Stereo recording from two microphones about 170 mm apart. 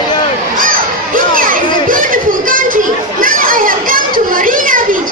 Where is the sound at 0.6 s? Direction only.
55° right (ahead or behind).